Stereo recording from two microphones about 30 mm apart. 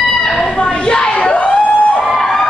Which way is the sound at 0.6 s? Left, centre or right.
Left.